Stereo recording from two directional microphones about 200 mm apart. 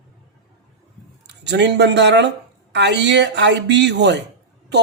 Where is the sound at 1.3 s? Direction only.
60° right (ahead or behind).